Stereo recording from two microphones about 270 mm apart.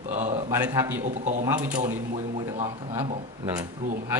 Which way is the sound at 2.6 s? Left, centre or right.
Centre.